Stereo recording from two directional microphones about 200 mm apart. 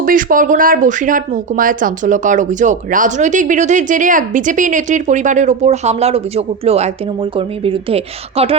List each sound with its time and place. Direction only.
0.0 s speech: 45° right (ahead or behind)